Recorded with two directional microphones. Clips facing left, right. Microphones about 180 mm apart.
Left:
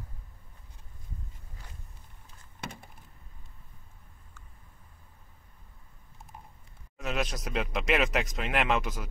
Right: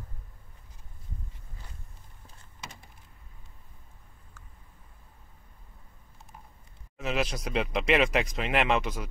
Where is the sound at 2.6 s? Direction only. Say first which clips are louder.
Left 5 dB; 60° left (ahead or behind).